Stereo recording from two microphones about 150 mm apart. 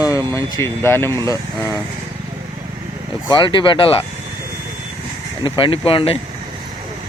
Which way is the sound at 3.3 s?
30° left (ahead or behind).